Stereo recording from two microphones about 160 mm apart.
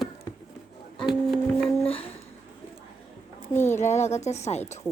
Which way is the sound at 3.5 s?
15° left (ahead or behind).